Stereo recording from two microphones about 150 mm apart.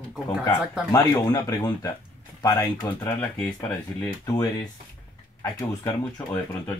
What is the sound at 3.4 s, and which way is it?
Speech, 5° left (ahead or behind).